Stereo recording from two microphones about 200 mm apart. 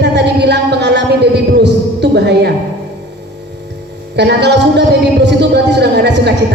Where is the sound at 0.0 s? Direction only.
60° right (ahead or behind).